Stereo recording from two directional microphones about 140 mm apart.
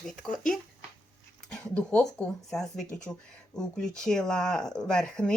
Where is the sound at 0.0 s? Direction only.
5° left (ahead or behind).